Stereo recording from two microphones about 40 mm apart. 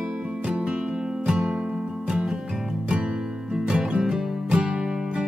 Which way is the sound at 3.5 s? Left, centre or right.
Centre.